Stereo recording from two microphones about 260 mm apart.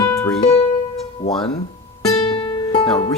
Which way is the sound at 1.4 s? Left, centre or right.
Centre.